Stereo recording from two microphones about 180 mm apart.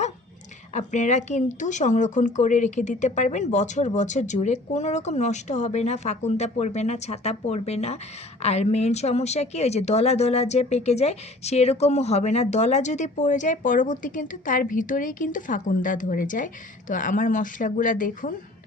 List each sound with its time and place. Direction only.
0.7 s speech: 40° left (ahead or behind)